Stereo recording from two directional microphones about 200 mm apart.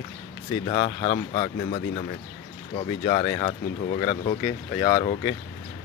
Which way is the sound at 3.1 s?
25° left (ahead or behind).